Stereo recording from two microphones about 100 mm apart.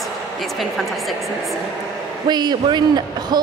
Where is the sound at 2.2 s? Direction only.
45° right (ahead or behind).